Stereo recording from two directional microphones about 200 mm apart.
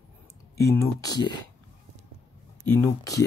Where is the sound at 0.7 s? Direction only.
15° left (ahead or behind).